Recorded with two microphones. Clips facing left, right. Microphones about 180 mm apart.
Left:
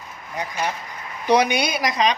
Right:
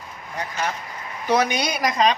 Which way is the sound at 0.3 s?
15° left (ahead or behind).